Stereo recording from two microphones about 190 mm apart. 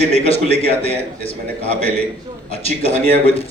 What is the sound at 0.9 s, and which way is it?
Speech, 30° left (ahead or behind).